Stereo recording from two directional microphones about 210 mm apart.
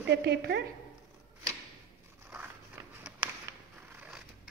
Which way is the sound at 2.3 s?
10° right (ahead or behind).